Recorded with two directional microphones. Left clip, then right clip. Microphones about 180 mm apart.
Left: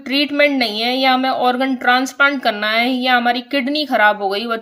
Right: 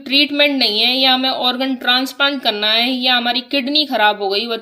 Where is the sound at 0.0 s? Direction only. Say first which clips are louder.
Right 1 dB; 40° left (ahead or behind).